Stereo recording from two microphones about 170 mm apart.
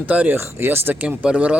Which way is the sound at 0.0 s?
10° right (ahead or behind).